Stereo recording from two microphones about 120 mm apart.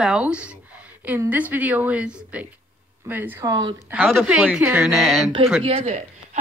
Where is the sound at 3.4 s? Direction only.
30° right (ahead or behind).